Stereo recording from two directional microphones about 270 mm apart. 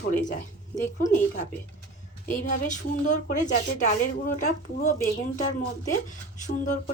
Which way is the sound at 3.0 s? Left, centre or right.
Left.